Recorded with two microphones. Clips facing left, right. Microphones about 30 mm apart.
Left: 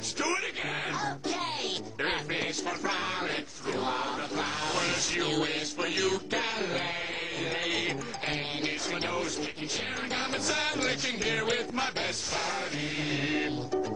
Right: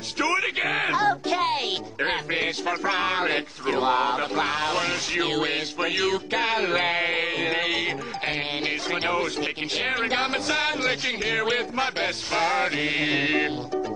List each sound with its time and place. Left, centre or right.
0.2 s speech: right
2.3 s music: right
4.7 s music: right
6.3 s music: right
7.7 s music: right
10.0 s music: right
10.5 s music: right
12.4 s mantra: right